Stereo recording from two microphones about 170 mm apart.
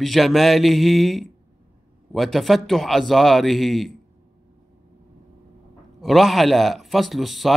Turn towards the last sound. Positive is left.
turn(degrees=0)  # may be behind; listen again after turning